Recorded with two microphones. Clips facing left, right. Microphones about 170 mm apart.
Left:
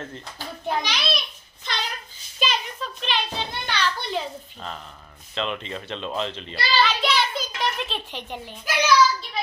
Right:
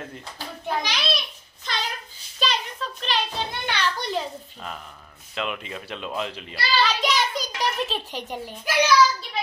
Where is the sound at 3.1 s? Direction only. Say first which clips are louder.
Right 1 dB; 35° right (ahead or behind).